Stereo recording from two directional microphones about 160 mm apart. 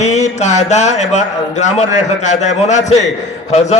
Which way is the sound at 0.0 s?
45° left (ahead or behind).